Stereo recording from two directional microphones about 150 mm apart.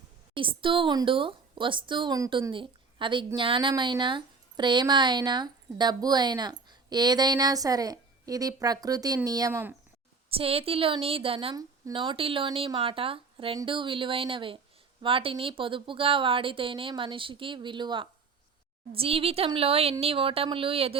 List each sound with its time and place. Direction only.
0.3 s a woman's voice: 35° right (ahead or behind); by 9.7 s 15° right (ahead or behind)
10.2 s a woman's voice: 40° right (ahead or behind)